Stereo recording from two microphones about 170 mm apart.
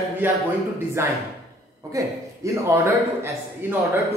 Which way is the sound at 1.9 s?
20° right (ahead or behind).